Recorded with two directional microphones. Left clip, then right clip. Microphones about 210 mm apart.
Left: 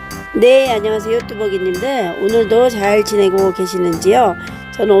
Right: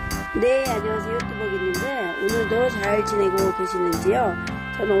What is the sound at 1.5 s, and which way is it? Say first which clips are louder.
Speech: left 5 dB; 5° left (ahead or behind).